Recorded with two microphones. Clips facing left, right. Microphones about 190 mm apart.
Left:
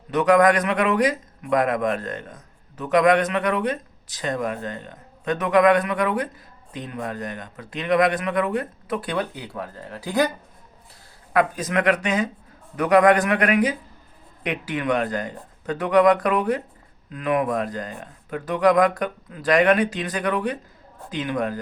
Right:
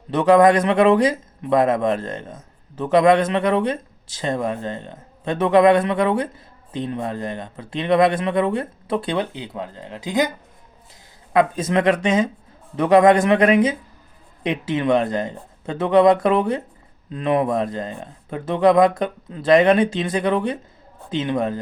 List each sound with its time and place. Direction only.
0.1 s a man's voice: 30° right (ahead or behind)
11.3 s a man's voice: 25° right (ahead or behind)